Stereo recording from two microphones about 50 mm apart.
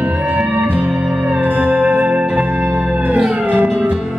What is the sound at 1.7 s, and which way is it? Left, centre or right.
Music, right.